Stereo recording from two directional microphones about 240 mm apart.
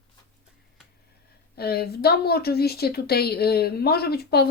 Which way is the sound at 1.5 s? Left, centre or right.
Left.